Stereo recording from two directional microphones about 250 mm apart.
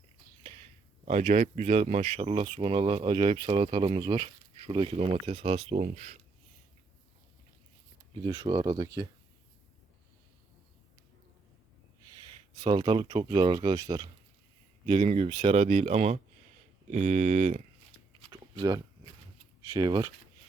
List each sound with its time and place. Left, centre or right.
1.0 s speech: right
8.1 s speech: centre
12.5 s speech: centre
18.2 s a sound: centre
19.6 s speech: centre